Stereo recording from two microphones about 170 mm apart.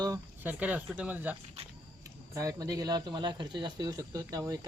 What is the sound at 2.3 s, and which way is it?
Speech, 20° right (ahead or behind).